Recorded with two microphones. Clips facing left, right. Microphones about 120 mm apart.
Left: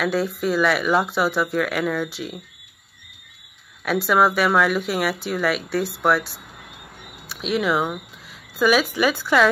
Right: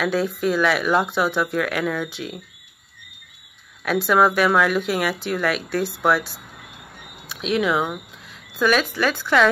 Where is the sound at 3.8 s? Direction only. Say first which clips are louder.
Right 1 dB; centre (ahead or behind).